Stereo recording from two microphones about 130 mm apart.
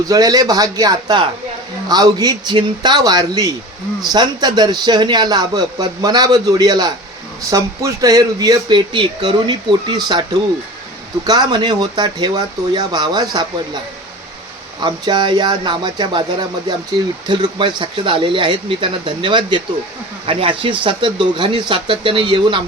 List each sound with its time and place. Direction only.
0.1 s a man's voice: 30° right (ahead or behind)
11.3 s a man's voice: 30° right (ahead or behind)
14.8 s a man's voice: 35° right (ahead or behind)